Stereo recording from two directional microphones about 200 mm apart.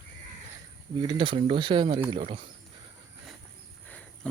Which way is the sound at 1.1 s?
25° right (ahead or behind).